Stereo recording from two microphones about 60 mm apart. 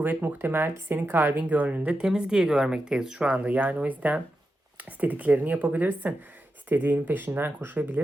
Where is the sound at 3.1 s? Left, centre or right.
Right.